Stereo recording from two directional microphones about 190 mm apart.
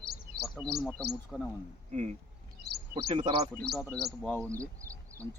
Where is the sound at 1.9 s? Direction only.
35° right (ahead or behind).